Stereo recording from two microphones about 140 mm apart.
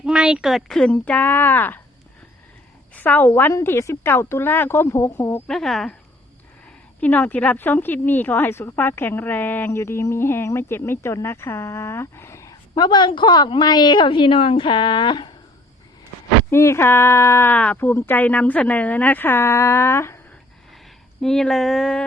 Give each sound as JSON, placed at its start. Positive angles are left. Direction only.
{"t": 0.0, "sound": "a woman's voice", "side_deg": -5}
{"t": 2.9, "sound": "a woman's voice", "side_deg": 10}
{"t": 5.5, "sound": "a sound", "side_deg": 0}
{"t": 7.0, "sound": "a woman's voice", "side_deg": 10}
{"t": 16.5, "sound": "a woman's voice", "side_deg": 20}
{"t": 21.2, "sound": "a sound", "side_deg": 5}